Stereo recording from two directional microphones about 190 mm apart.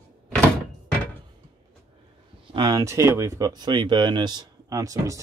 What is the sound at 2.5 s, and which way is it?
Speech, 20° right (ahead or behind).